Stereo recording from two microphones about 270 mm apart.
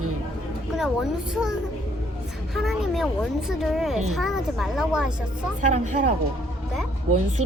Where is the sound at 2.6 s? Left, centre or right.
Centre.